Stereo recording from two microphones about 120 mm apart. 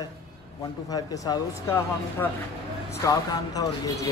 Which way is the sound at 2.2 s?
15° left (ahead or behind).